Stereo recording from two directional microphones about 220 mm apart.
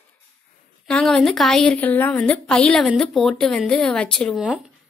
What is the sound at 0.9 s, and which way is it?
Speech, 5° left (ahead or behind).